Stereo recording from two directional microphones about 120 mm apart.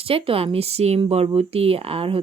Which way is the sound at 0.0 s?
50° right (ahead or behind).